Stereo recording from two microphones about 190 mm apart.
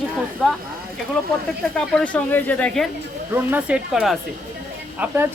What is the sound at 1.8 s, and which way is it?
Speech, 5° left (ahead or behind).